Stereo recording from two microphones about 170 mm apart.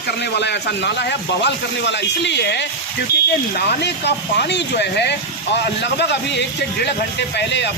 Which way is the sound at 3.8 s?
80° left.